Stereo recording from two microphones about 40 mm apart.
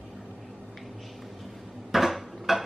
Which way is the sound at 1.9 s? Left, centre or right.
Centre.